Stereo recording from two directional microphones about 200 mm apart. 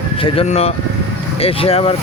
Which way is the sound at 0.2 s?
30° left (ahead or behind).